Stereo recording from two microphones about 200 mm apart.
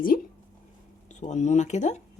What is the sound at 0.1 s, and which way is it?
Speech, 45° left (ahead or behind).